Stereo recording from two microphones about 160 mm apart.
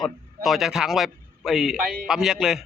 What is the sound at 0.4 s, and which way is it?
A man's voice, centre (ahead or behind).